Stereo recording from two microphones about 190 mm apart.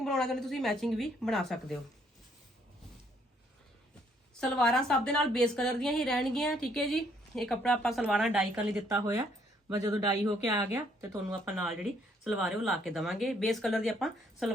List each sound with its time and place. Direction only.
0.0 s a woman's voice: centre (ahead or behind)
4.4 s a woman's voice: 5° left (ahead or behind)